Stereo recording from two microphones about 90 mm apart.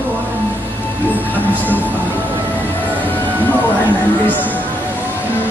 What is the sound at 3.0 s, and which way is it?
Music, 20° left (ahead or behind).